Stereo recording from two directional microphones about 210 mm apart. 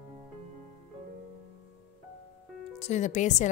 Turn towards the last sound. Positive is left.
turn(degrees=35)  # may be behind; listen again after turning